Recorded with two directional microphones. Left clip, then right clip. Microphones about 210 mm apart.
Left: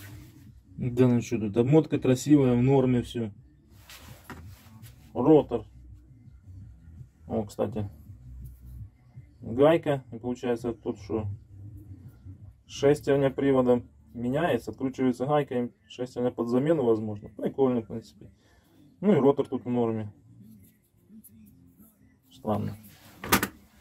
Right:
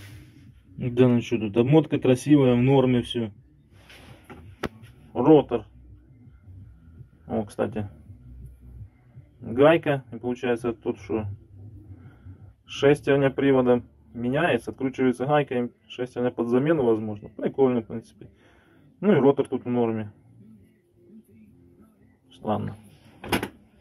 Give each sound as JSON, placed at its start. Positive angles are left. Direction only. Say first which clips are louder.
{"t": 0.7, "sound": "speech", "louder": "right 4 dB", "side_deg": 10}
{"t": 5.1, "sound": "speech", "louder": "right 3 dB", "side_deg": 10}
{"t": 7.2, "sound": "speech", "louder": "right 2 dB", "side_deg": 10}
{"t": 9.4, "sound": "speech", "louder": "right 3 dB", "side_deg": 10}
{"t": 12.7, "sound": "speech", "louder": "right 3 dB", "side_deg": 10}
{"t": 22.4, "sound": "speech", "louder": "right 3 dB", "side_deg": 20}